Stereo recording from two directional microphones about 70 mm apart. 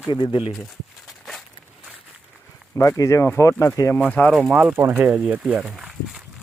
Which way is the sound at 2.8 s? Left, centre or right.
Left.